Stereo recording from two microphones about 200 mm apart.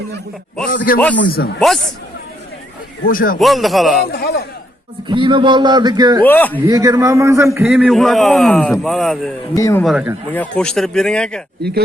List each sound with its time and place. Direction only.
0.9 s speech: 45° left (ahead or behind)
1.5 s a man's voice: centre (ahead or behind)
3.1 s speech: 45° left (ahead or behind)
3.4 s a man's voice: centre (ahead or behind)
4.1 s speech: 55° left (ahead or behind)
5.0 s a man's voice: 25° right (ahead or behind)
6.2 s speech: 10° left (ahead or behind)
6.7 s a man's voice: 15° right (ahead or behind); by 9.3 s centre (ahead or behind)
9.6 s speech: 15° left (ahead or behind)
9.8 s a man's voice: 5° right (ahead or behind)
10.3 s a man's voice: 5° left (ahead or behind)